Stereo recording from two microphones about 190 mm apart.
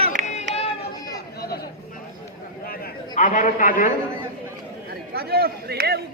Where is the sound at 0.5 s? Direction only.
35° left (ahead or behind).